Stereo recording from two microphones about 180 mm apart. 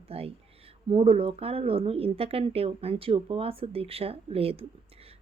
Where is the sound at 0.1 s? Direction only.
35° right (ahead or behind).